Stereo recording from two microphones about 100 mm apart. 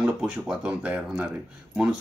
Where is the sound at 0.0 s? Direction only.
5° right (ahead or behind).